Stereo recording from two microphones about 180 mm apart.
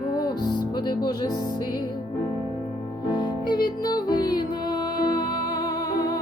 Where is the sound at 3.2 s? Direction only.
25° left (ahead or behind).